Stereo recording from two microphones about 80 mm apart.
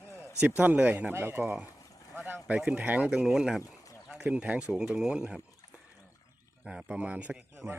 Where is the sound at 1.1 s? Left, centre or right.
Right.